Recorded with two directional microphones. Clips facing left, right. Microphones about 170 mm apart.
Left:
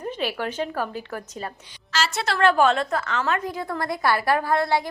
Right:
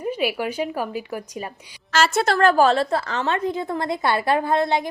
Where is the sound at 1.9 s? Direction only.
50° right (ahead or behind).